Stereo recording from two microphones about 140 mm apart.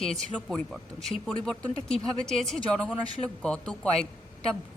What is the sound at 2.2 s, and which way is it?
Speech, 5° left (ahead or behind).